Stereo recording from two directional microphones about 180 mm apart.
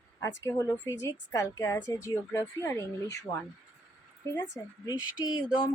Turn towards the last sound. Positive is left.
turn(degrees=25)  # may be behind; listen again after turning